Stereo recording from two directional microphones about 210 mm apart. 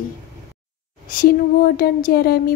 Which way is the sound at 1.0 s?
45° left (ahead or behind).